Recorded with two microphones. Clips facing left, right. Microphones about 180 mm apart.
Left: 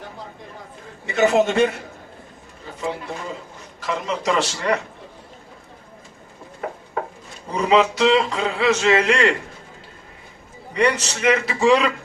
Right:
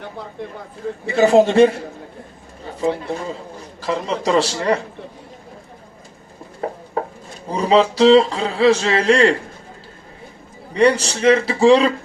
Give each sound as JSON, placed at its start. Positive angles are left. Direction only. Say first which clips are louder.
{"t": 1.0, "sound": "a man's voice", "louder": "right 4 dB", "side_deg": -30}
{"t": 3.8, "sound": "a man's voice", "louder": "right 3 dB", "side_deg": -35}
{"t": 6.6, "sound": "a man's voice", "louder": "right 4 dB", "side_deg": -30}
{"t": 10.8, "sound": "a man's voice", "louder": "right 5 dB", "side_deg": -30}